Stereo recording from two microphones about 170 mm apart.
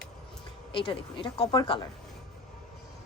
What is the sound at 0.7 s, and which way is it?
A woman's voice, 30° left (ahead or behind).